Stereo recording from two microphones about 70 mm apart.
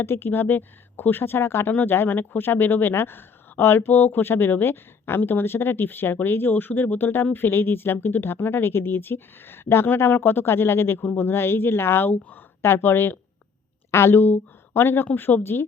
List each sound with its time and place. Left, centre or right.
0.0 s speech: left